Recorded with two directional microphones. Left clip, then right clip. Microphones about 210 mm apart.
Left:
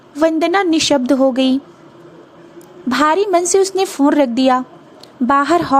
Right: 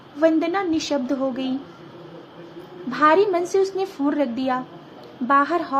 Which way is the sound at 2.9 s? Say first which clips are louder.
Left 3 dB; 45° left (ahead or behind).